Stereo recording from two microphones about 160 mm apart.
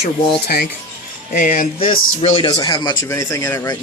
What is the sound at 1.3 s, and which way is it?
Speech, 55° left (ahead or behind).